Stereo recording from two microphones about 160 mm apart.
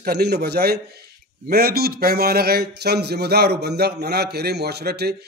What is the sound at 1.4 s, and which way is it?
Speech, 75° right (ahead or behind).